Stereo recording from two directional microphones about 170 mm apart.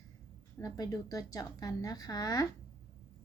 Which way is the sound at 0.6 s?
20° left (ahead or behind).